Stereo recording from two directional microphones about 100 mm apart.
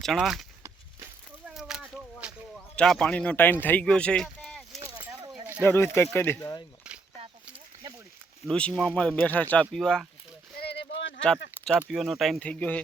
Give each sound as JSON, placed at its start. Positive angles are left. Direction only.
{"t": 0.2, "sound": "speech", "side_deg": -5}
{"t": 1.5, "sound": "a sound", "side_deg": -5}
{"t": 2.7, "sound": "a man's voice", "side_deg": 5}
{"t": 5.6, "sound": "speech", "side_deg": 25}
{"t": 6.4, "sound": "speech", "side_deg": 35}
{"t": 8.4, "sound": "speech", "side_deg": 10}
{"t": 9.7, "sound": "speech", "side_deg": 5}
{"t": 11.2, "sound": "speech", "side_deg": 10}
{"t": 12.4, "sound": "speech", "side_deg": 15}